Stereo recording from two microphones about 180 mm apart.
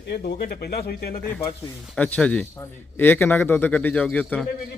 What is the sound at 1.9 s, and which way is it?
A man's voice, 5° left (ahead or behind).